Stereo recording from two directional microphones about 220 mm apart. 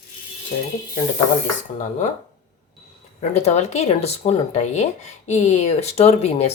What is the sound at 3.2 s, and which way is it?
Speech, 30° left (ahead or behind).